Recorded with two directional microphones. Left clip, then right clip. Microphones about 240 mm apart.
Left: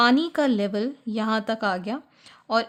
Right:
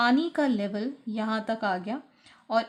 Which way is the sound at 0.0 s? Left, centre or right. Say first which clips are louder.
Left 4 dB; left.